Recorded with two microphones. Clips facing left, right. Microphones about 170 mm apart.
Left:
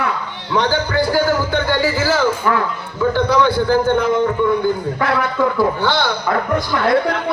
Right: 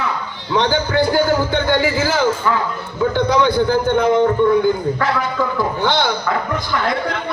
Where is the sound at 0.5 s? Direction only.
20° right (ahead or behind).